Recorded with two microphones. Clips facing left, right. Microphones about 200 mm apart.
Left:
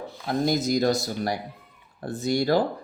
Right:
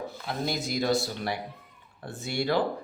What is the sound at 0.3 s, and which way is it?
Speech, 40° left (ahead or behind).